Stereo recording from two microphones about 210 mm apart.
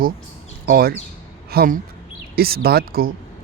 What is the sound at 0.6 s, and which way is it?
Speech, 45° right (ahead or behind).